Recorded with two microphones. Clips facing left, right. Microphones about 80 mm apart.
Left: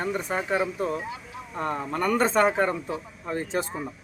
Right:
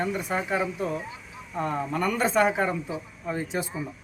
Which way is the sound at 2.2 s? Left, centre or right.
Left.